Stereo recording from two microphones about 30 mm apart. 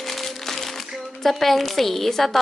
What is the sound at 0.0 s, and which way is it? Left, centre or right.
Crumpling, centre.